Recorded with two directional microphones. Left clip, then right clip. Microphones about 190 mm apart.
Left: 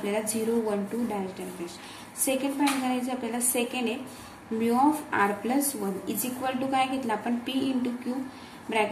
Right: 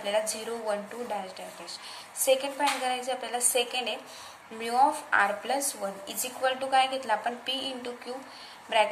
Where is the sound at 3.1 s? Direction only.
15° right (ahead or behind).